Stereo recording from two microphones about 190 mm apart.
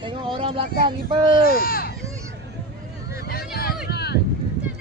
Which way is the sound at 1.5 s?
50° left (ahead or behind).